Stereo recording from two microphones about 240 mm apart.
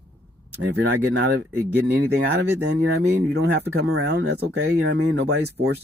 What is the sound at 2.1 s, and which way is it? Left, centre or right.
Speech, right.